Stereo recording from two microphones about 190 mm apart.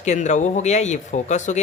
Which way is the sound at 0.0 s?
40° left (ahead or behind).